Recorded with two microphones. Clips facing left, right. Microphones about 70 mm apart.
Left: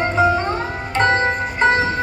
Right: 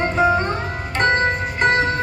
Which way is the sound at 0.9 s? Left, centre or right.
Centre.